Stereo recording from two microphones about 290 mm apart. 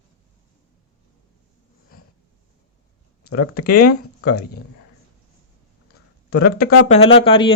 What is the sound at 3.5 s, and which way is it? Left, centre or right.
Speech, left.